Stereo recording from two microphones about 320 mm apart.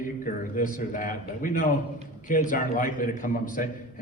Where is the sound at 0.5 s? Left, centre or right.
Left.